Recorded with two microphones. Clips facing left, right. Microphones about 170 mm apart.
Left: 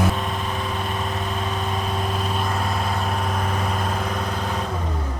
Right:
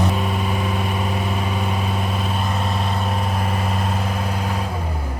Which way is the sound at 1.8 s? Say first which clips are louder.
Right 1 dB; centre (ahead or behind).